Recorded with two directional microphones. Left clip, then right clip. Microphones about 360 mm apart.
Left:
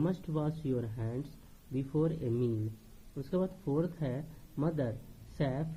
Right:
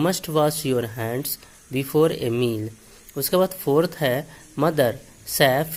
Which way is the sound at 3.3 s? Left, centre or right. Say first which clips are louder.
Right 15 dB; right.